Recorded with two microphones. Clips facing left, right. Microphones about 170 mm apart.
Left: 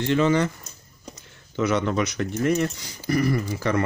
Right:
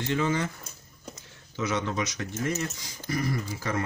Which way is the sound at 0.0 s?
75° left (ahead or behind).